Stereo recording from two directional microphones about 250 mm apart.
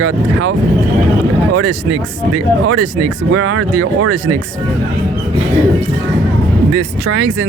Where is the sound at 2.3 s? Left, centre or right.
Right.